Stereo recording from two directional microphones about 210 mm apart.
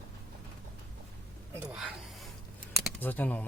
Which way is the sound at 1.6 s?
Centre (ahead or behind).